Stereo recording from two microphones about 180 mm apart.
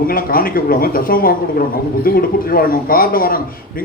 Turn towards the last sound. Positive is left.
turn(degrees=55)  # may be behind; listen again after turning